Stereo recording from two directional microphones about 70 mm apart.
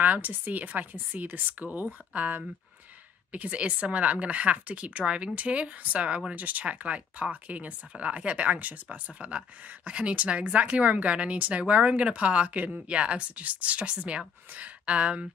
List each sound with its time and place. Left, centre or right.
0.0 s speech: right